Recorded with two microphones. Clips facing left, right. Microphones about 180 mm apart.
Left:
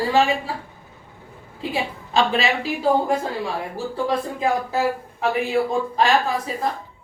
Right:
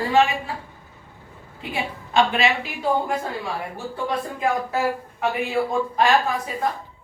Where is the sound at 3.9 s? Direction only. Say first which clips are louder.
Left 3 dB; 30° left (ahead or behind).